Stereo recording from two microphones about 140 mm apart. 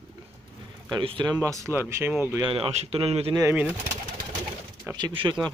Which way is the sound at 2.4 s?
40° right (ahead or behind).